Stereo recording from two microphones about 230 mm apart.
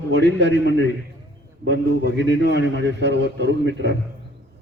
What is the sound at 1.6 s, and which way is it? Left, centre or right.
A man's voice, right.